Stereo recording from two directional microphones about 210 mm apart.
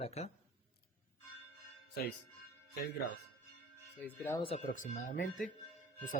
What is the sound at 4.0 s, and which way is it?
Speech, 10° left (ahead or behind).